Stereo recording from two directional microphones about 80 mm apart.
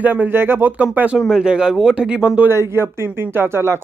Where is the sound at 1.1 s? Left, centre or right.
Centre.